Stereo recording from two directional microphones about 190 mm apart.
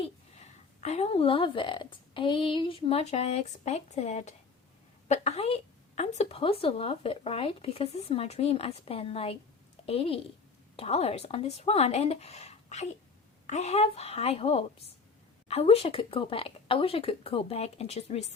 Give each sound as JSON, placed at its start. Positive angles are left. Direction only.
{"t": 0.0, "sound": "a woman's voice", "side_deg": 35}